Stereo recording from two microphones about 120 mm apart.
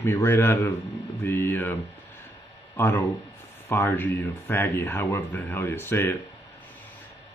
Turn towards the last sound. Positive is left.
turn(degrees=20)  # may be behind; listen again after turning